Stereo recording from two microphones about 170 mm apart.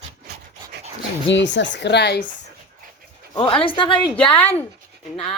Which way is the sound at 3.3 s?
30° left (ahead or behind).